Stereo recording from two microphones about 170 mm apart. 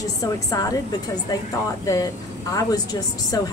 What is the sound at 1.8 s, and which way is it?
A woman's voice, 20° left (ahead or behind).